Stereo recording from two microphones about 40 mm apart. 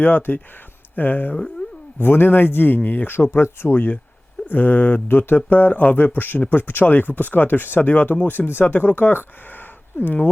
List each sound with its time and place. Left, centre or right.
0.0 s speech: left
2.0 s speech: left
3.3 s speech: left
3.8 s speech: left
5.0 s speech: left
5.5 s speech: left
8.4 s speech: left